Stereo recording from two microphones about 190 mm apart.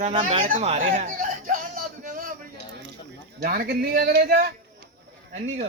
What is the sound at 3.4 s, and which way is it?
A man's voice, 50° right (ahead or behind).